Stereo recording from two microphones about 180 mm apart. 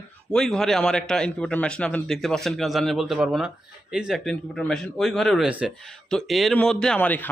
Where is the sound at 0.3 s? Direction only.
5° left (ahead or behind).